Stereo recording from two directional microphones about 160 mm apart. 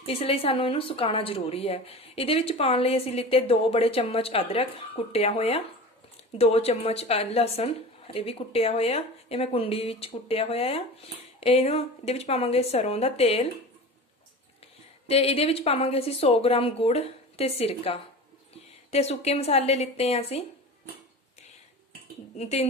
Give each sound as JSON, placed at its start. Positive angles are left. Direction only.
{"t": 0.0, "sound": "a woman's voice", "side_deg": 35}
{"t": 15.0, "sound": "a woman's voice", "side_deg": 40}
{"t": 22.4, "sound": "speech", "side_deg": 40}